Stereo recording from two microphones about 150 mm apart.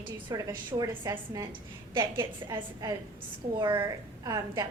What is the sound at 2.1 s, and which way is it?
A woman's voice, 25° right (ahead or behind).